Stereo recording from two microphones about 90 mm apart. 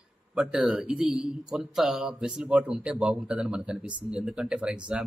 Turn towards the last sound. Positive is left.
turn(degrees=-10)  # may be behind; listen again after turning